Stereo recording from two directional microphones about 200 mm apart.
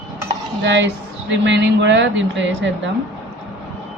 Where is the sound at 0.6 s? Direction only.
65° right (ahead or behind).